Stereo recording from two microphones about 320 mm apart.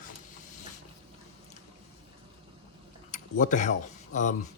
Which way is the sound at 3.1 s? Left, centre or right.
Left.